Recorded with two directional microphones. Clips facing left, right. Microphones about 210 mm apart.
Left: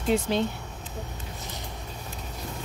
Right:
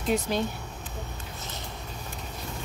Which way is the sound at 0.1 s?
25° left (ahead or behind).